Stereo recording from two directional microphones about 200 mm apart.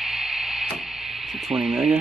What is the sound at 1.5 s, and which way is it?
Speech, 5° right (ahead or behind).